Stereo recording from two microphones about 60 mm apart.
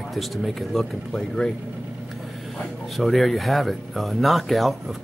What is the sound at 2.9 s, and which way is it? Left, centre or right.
Speech, centre.